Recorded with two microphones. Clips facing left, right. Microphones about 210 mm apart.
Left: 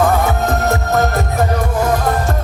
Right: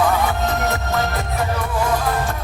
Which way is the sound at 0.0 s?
45° left (ahead or behind).